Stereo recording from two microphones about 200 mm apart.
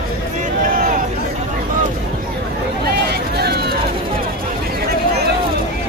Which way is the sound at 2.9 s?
55° right (ahead or behind).